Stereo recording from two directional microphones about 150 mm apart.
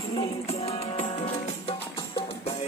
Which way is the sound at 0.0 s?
40° left (ahead or behind).